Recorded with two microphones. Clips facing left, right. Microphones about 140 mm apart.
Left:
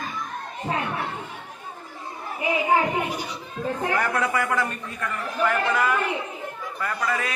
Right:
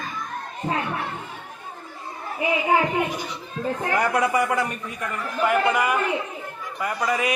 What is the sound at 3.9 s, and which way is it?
A woman's voice, 15° right (ahead or behind).